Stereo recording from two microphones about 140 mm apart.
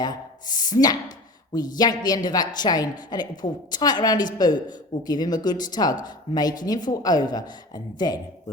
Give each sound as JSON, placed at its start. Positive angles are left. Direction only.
{"t": 0.0, "sound": "speech", "side_deg": 30}